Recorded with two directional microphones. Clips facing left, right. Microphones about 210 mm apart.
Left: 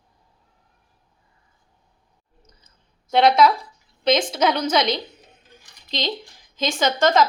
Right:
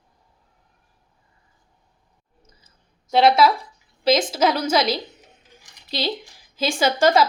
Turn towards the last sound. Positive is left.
turn(degrees=-10)  # may be behind; listen again after turning